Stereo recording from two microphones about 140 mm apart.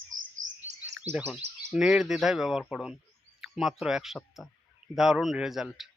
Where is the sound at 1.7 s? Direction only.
5° right (ahead or behind).